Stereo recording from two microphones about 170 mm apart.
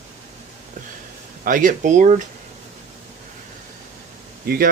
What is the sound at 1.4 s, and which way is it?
Speech, 50° right (ahead or behind).